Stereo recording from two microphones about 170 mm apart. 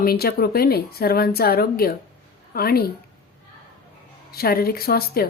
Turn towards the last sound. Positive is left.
turn(degrees=65)  # may be behind; listen again after turning